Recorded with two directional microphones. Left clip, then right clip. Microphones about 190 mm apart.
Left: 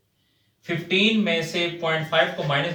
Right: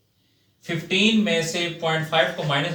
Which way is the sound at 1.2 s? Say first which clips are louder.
Even; 15° left (ahead or behind).